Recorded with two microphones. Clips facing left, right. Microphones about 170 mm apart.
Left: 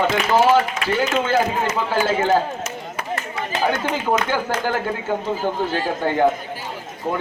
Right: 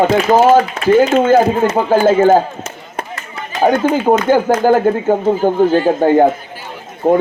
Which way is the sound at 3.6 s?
55° right (ahead or behind).